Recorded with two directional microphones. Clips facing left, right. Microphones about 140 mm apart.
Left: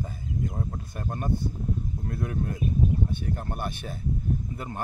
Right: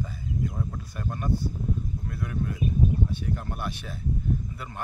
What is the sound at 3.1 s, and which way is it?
Speech, 50° left (ahead or behind).